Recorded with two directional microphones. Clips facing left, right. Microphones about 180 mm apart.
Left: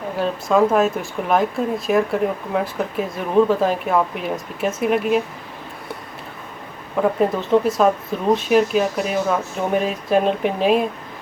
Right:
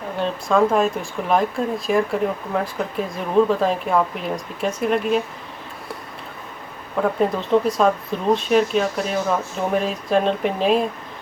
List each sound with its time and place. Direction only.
0.2 s speech: 5° left (ahead or behind)
6.9 s speech: 5° left (ahead or behind)